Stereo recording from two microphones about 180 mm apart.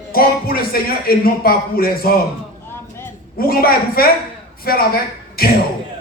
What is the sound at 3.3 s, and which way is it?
A man's voice, 55° left (ahead or behind).